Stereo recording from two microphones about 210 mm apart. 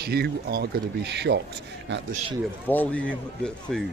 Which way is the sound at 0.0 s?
50° right (ahead or behind).